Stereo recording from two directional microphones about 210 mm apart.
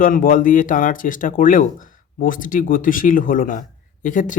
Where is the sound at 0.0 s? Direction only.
40° left (ahead or behind).